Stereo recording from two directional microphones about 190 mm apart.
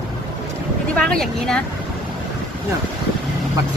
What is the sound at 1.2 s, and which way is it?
Speech, 5° left (ahead or behind).